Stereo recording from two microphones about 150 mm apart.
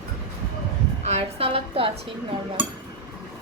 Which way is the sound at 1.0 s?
45° right (ahead or behind).